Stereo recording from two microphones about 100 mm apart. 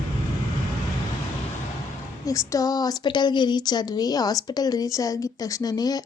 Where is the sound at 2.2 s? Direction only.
35° left (ahead or behind).